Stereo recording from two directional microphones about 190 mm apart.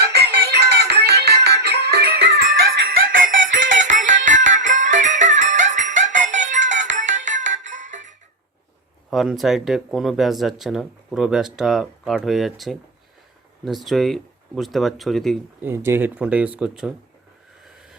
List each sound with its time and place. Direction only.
0.0 s music: 60° right (ahead or behind)
3.1 s music: 45° right (ahead or behind)
9.0 s speech: centre (ahead or behind)
15.6 s speech: 10° right (ahead or behind)